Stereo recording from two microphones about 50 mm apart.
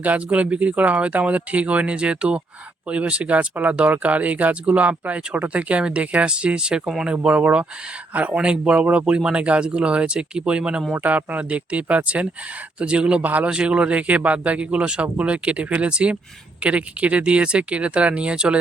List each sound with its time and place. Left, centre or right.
0.0 s speech: right
10.9 s speech: right
13.2 s a man's voice: right
13.5 s speech: centre